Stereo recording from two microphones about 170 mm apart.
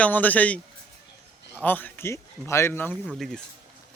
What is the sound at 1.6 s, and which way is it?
Speech, 10° left (ahead or behind).